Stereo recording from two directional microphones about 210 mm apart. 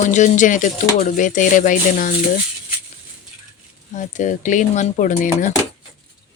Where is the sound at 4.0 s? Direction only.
35° left (ahead or behind).